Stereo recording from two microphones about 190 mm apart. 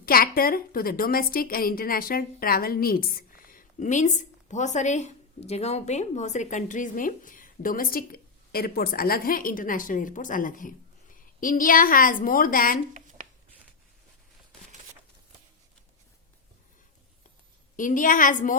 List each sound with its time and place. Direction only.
0.0 s a woman's voice: 50° left (ahead or behind)
17.7 s a woman's voice: 45° left (ahead or behind)